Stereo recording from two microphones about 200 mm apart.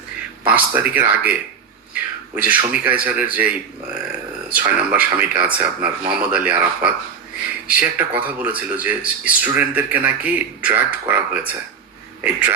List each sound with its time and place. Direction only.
0.4 s speech: 10° right (ahead or behind)
1.9 s a sound: 5° right (ahead or behind)
2.7 s speech: 5° right (ahead or behind)
4.5 s speech: 5° right (ahead or behind)